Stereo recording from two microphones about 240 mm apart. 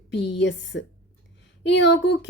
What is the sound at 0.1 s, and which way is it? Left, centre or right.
A woman's voice, left.